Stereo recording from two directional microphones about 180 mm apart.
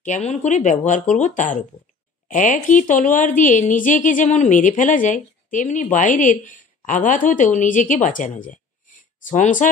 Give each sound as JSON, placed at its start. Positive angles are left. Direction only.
{"t": 0.0, "sound": "a woman's voice", "side_deg": 40}